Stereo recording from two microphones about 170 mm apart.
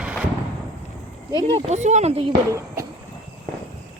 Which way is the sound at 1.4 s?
35° right (ahead or behind).